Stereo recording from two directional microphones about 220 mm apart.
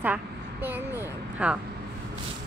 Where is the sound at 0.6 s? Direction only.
10° right (ahead or behind).